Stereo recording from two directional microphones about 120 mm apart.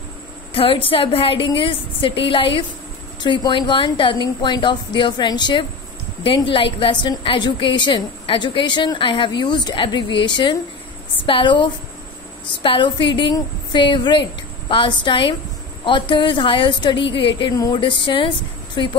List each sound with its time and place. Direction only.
0.5 s a woman's voice: 50° left (ahead or behind)